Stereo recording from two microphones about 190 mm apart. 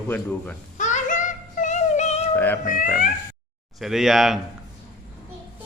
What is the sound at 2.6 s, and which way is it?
Speech, 45° left (ahead or behind).